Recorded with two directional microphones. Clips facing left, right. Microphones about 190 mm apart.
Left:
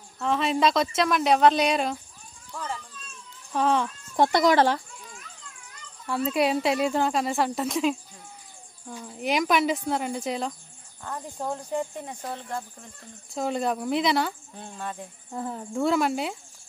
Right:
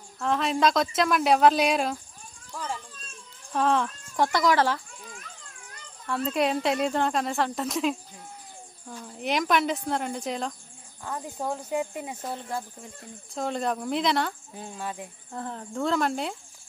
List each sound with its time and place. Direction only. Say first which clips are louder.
0.2 s speech: left 1 dB; centre (ahead or behind)
4.2 s speech: left 3 dB; 20° left (ahead or behind)
6.0 s speech: left 2 dB; 5° left (ahead or behind)
15.3 s speech: left 3 dB; 5° left (ahead or behind)